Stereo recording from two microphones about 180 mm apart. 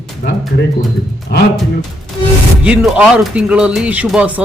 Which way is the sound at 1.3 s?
65° left (ahead or behind).